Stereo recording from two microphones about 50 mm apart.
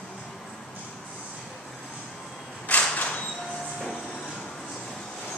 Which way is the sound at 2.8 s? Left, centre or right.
Left.